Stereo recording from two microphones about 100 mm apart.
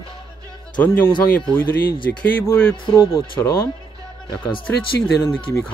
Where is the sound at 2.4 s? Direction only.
20° left (ahead or behind).